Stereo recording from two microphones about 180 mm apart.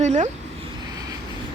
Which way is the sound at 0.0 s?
40° right (ahead or behind).